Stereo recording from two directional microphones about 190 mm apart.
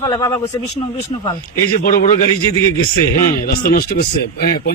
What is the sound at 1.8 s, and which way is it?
Speech, 45° left (ahead or behind).